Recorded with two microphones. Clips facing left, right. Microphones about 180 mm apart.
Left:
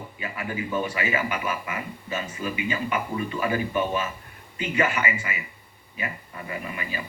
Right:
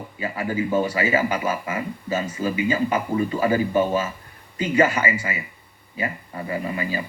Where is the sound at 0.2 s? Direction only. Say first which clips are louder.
Right 7 dB; 30° right (ahead or behind).